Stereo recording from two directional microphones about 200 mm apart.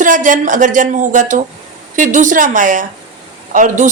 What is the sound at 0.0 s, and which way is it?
A woman's voice, 40° right (ahead or behind).